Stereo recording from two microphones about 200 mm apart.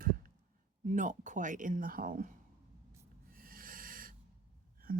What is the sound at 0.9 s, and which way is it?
A woman's voice, 40° right (ahead or behind).